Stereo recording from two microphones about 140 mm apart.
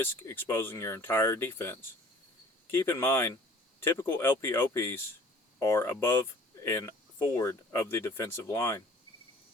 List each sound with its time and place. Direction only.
0.0 s speech: 15° left (ahead or behind)